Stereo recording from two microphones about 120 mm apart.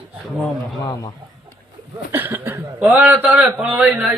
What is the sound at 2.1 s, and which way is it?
Speech, 15° right (ahead or behind).